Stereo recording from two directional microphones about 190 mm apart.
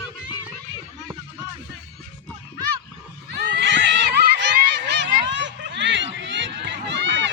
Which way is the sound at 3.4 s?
65° right (ahead or behind).